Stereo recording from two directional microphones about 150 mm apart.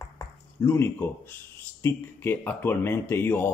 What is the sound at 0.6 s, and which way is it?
Speech, 15° left (ahead or behind).